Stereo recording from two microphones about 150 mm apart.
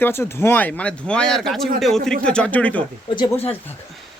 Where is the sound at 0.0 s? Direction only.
15° left (ahead or behind).